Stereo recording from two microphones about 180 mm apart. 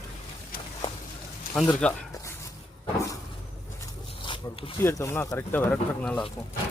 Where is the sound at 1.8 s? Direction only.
5° left (ahead or behind).